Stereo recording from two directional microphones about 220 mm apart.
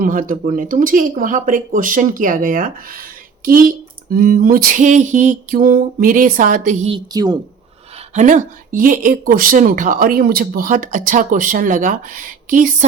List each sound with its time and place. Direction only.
0.0 s speech: 40° right (ahead or behind)
6.9 s a woman's voice: 20° right (ahead or behind)
8.1 s speech: 35° right (ahead or behind)